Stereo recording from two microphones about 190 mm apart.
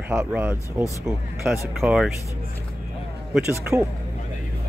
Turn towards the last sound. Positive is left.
turn(degrees=-10)  # may be behind; listen again after turning